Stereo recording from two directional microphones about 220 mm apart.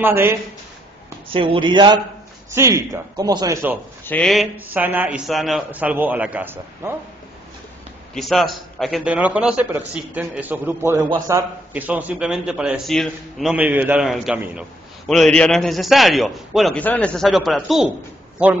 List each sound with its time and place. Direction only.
0.0 s a man's voice: 10° right (ahead or behind)
1.3 s a man's voice: 25° right (ahead or behind)
4.0 s a man's voice: 5° left (ahead or behind); by 7.0 s 10° right (ahead or behind)
8.1 s a man's voice: centre (ahead or behind)